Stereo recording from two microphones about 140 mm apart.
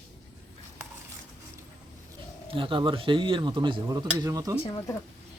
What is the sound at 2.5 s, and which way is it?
Speech, 40° right (ahead or behind).